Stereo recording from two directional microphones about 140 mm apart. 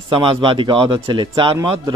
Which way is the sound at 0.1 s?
40° right (ahead or behind).